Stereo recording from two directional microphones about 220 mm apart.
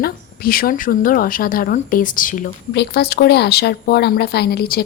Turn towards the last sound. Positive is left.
turn(degrees=45)  # may be behind; listen again after turning